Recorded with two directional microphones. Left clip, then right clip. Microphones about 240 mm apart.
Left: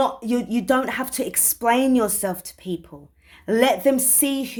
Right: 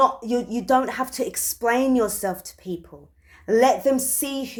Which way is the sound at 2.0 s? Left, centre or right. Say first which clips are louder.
Left 1 dB; left.